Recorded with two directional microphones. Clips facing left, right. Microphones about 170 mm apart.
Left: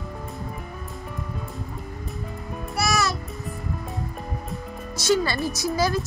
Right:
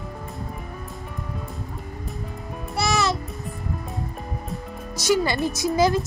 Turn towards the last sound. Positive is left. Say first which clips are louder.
# right 3 dB
turn(degrees=-20)  # may be behind; listen again after turning